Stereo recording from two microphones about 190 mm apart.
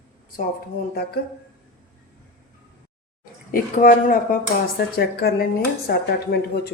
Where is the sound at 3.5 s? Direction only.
50° left (ahead or behind).